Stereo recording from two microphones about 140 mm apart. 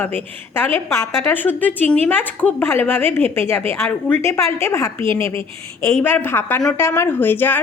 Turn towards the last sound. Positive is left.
turn(degrees=15)  # may be behind; listen again after turning